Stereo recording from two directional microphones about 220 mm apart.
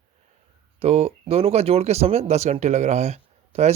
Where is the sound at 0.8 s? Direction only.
30° right (ahead or behind).